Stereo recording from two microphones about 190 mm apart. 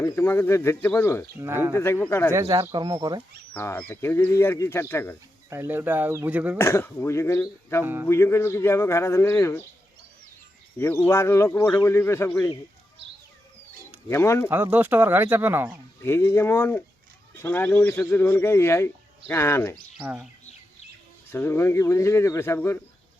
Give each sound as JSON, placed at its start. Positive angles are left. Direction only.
{"t": 0.0, "sound": "speech", "side_deg": 10}
{"t": 1.4, "sound": "speech", "side_deg": -10}
{"t": 1.7, "sound": "speech", "side_deg": 15}
{"t": 2.3, "sound": "speech", "side_deg": -15}
{"t": 3.5, "sound": "speech", "side_deg": 10}
{"t": 5.5, "sound": "speech", "side_deg": -10}
{"t": 6.6, "sound": "speech", "side_deg": 15}
{"t": 10.8, "sound": "speech", "side_deg": 15}
{"t": 14.1, "sound": "speech", "side_deg": 15}
{"t": 14.5, "sound": "speech", "side_deg": -10}
{"t": 16.0, "sound": "speech", "side_deg": 15}
{"t": 19.9, "sound": "speech", "side_deg": -5}
{"t": 21.3, "sound": "speech", "side_deg": 10}